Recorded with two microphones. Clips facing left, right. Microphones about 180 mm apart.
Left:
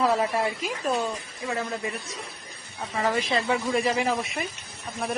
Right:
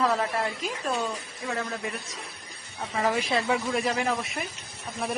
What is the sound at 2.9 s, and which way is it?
Speech, 5° right (ahead or behind).